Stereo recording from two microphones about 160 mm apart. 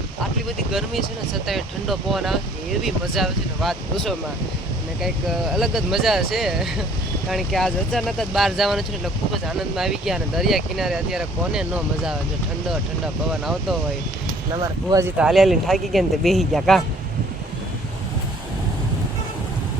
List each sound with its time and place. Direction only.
0.7 s speech: centre (ahead or behind)
13.4 s speech: centre (ahead or behind)
14.5 s speech: 25° right (ahead or behind)
15.0 s speech: 5° right (ahead or behind)